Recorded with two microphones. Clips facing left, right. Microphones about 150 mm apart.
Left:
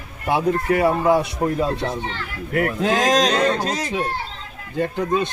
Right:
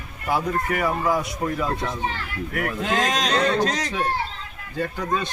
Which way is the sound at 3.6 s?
5° left (ahead or behind).